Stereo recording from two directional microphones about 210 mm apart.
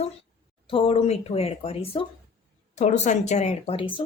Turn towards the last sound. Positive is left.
turn(degrees=25)  # may be behind; listen again after turning